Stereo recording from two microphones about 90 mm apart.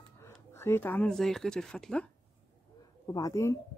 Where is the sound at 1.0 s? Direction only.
5° left (ahead or behind).